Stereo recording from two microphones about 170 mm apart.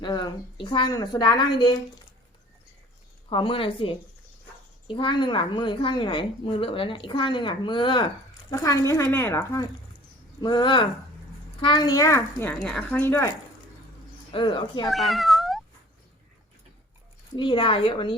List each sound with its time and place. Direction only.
0.0 s a woman's voice: 25° left (ahead or behind)
3.2 s a woman's voice: 30° left (ahead or behind)
10.4 s a woman's voice: 25° left (ahead or behind)
12.5 s speech: 5° left (ahead or behind)
14.3 s a woman's voice: 30° left (ahead or behind)
14.8 s cat: centre (ahead or behind)
17.3 s a woman's voice: 30° left (ahead or behind)